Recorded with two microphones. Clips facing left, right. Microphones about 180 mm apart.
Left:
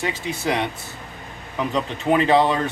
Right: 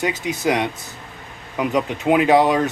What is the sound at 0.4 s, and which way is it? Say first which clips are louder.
Speech: right 3 dB; 15° right (ahead or behind).